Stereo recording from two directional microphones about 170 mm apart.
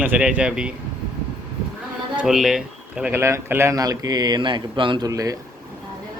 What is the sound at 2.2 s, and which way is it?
Speech, centre (ahead or behind).